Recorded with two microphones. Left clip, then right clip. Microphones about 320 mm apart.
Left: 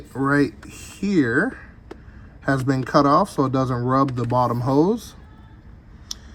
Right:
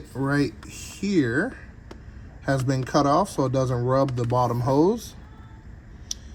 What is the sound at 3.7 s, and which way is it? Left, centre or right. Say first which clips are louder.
Speech: left 2 dB; left.